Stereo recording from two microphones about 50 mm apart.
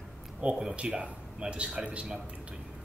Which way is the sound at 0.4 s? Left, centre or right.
Right.